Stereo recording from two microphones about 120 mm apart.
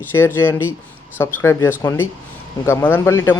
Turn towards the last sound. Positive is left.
turn(degrees=20)  # may be behind; listen again after turning